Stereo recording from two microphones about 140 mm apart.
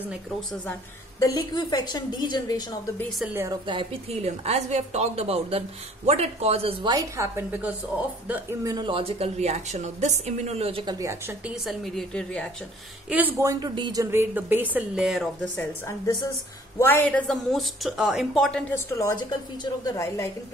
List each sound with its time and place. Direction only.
1.2 s a woman's voice: 30° left (ahead or behind)
3.6 s a woman's voice: 40° right (ahead or behind)
6.9 s a woman's voice: 25° right (ahead or behind)
8.7 s a woman's voice: 35° right (ahead or behind)
11.0 s a woman's voice: 20° right (ahead or behind)
11.4 s a woman's voice: 5° right (ahead or behind)
13.1 s speech: 10° right (ahead or behind)
13.5 s speech: 30° right (ahead or behind)
14.1 s speech: 15° right (ahead or behind)
15.4 s a woman's voice: 10° left (ahead or behind)
16.1 s a woman's voice: 25° left (ahead or behind)
17.3 s a woman's voice: centre (ahead or behind)
18.9 s a woman's voice: 20° left (ahead or behind)